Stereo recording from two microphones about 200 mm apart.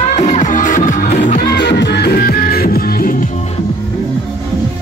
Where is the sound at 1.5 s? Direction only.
55° left (ahead or behind).